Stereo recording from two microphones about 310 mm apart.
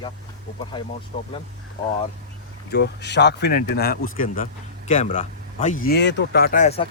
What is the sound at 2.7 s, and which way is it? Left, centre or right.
Speech, left.